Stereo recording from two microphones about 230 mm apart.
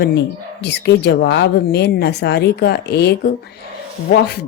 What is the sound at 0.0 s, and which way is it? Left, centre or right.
Speech, left.